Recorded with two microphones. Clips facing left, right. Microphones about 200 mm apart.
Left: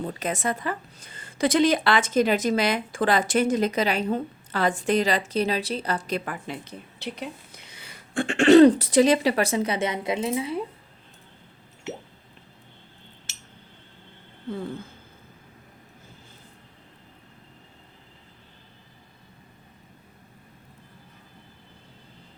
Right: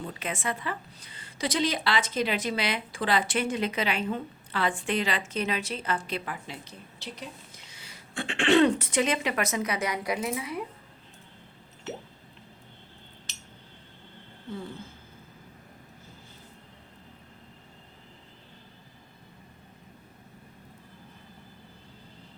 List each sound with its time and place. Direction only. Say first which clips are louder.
0.0 s a woman's voice: left 6 dB; 40° left (ahead or behind)